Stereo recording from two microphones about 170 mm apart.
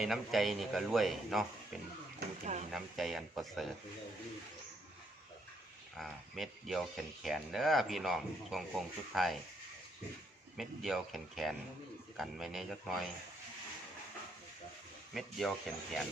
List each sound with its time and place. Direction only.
0.0 s speech: centre (ahead or behind)
2.4 s a sound: 45° right (ahead or behind)
2.7 s speech: centre (ahead or behind)
6.0 s speech: centre (ahead or behind)
10.6 s speech: centre (ahead or behind)
15.1 s speech: centre (ahead or behind)